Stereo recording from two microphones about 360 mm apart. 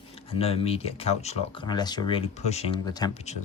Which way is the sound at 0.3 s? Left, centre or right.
Centre.